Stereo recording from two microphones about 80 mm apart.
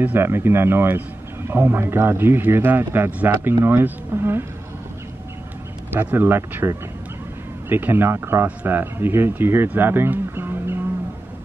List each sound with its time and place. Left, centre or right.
0.0 s a man's voice: right
6.1 s a man's voice: right